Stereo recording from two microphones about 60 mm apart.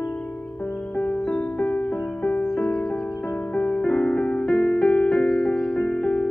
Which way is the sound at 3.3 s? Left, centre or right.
Left.